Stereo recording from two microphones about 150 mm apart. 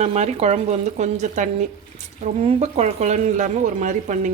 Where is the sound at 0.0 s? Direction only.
50° right (ahead or behind).